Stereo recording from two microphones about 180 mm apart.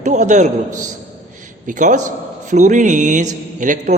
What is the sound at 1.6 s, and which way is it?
A man's voice, 45° right (ahead or behind).